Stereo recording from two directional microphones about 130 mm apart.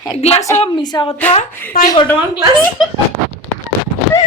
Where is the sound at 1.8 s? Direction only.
90° left.